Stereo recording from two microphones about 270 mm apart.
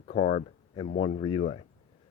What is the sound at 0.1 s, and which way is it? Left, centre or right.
Speech, left.